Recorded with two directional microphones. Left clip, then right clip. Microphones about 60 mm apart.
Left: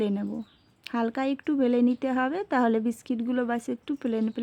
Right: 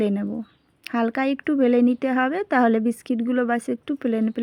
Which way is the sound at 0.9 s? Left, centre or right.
Right.